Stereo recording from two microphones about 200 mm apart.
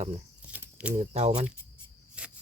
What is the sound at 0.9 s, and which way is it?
Speech, 35° right (ahead or behind).